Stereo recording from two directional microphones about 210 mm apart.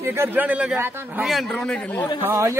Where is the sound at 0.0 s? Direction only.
10° right (ahead or behind); by 2.0 s 5° left (ahead or behind).